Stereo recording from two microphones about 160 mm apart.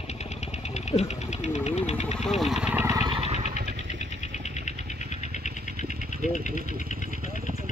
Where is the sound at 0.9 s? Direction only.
45° left (ahead or behind).